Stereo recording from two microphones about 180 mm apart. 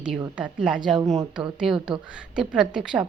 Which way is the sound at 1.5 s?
5° right (ahead or behind).